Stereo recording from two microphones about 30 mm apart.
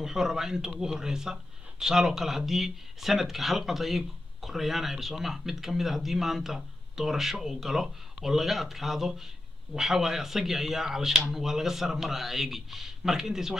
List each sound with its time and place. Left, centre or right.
0.0 s speech: centre